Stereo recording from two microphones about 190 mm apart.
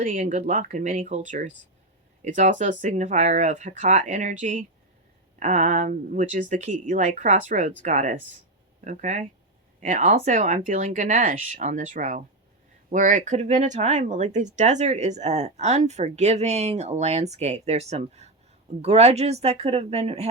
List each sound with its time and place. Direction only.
0.0 s speech: 45° right (ahead or behind)